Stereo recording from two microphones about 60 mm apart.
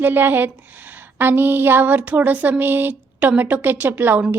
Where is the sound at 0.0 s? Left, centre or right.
Right.